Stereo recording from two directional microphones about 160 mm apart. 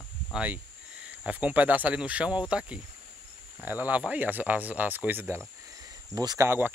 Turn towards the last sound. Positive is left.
turn(degrees=-15)  # may be behind; listen again after turning